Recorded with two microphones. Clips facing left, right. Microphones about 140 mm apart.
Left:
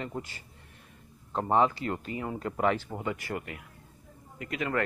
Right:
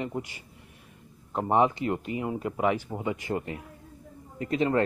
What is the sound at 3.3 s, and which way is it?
Speech, 30° right (ahead or behind).